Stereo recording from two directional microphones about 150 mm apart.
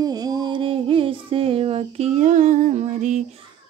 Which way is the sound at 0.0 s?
25° right (ahead or behind).